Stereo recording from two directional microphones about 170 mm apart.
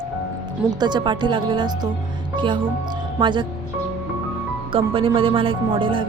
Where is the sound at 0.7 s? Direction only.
25° right (ahead or behind).